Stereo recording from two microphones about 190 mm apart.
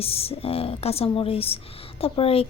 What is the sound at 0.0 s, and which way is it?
Speech, 30° left (ahead or behind).